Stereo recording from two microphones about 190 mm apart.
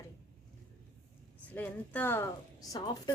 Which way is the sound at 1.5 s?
10° left (ahead or behind).